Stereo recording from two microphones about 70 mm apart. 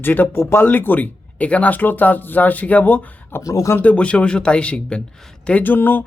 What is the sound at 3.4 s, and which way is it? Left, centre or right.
Speech, left.